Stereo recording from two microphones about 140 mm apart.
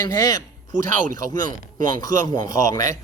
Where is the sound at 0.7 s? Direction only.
70° right (ahead or behind).